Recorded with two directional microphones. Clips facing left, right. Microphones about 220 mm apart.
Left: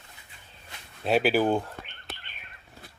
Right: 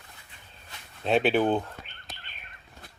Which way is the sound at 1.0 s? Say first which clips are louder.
Even; 5° left (ahead or behind).